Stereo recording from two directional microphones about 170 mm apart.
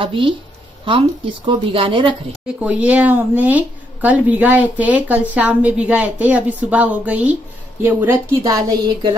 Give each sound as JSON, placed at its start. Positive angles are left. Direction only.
{"t": 0.0, "sound": "speech", "side_deg": -30}
{"t": 2.4, "sound": "a woman's voice", "side_deg": -5}